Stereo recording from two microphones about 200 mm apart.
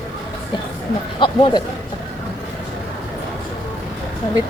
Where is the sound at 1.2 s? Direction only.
25° left (ahead or behind).